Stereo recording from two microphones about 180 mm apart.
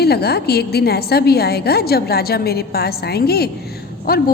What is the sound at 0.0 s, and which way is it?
A woman's voice, 60° left (ahead or behind).